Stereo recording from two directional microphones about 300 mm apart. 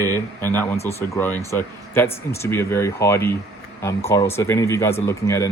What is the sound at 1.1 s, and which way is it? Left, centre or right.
Speech, centre.